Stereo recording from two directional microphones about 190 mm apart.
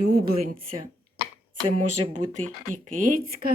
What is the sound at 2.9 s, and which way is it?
Speech, 50° right (ahead or behind).